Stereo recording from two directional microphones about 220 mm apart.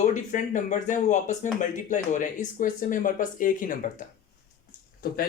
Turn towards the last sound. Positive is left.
turn(degrees=40)  # may be behind; listen again after turning